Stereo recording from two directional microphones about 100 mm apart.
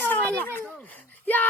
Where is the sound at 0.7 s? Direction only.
15° left (ahead or behind).